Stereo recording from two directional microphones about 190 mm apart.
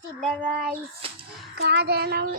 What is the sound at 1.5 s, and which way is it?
Child singing, 60° right (ahead or behind).